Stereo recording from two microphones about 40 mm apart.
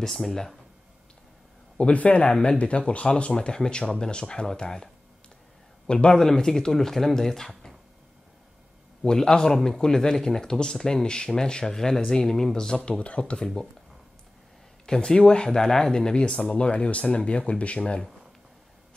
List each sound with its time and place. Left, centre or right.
1.8 s speech: left; by 4.8 s centre
5.9 s a man's voice: left
6.1 s speech: centre
9.0 s speech: centre
14.9 s speech: left
16.5 s speech: left